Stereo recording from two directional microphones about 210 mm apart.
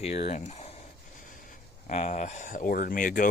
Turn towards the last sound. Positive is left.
turn(degrees=40)  # may be behind; listen again after turning